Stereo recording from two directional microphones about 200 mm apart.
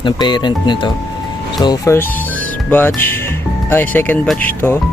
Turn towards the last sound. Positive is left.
turn(degrees=10)  # may be behind; listen again after turning